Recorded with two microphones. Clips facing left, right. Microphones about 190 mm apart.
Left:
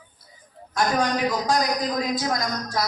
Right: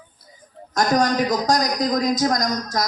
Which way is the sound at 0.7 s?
40° right (ahead or behind).